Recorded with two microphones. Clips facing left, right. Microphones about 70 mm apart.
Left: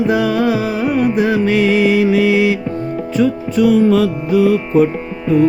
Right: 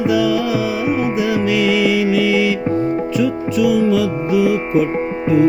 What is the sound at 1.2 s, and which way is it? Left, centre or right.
Music, left.